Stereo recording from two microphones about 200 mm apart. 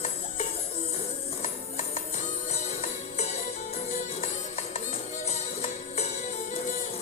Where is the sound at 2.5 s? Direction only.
35° left (ahead or behind).